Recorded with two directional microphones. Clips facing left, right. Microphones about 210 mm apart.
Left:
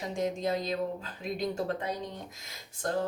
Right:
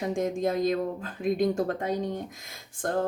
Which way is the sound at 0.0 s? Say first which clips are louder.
Right 4 dB; 50° right (ahead or behind).